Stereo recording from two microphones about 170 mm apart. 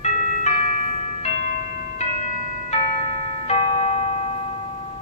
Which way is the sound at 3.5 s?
35° left (ahead or behind).